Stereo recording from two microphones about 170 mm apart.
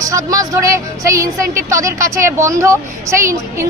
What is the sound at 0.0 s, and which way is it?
A woman's voice, 20° right (ahead or behind).